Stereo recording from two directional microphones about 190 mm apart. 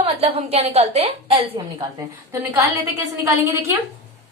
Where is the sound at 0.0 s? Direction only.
30° right (ahead or behind).